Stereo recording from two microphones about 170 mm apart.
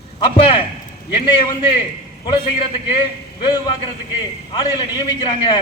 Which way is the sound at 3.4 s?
25° left (ahead or behind).